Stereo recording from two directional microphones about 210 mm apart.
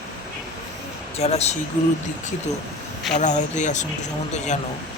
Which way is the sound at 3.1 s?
35° left (ahead or behind).